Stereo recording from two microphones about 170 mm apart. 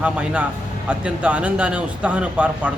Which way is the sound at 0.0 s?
5° right (ahead or behind).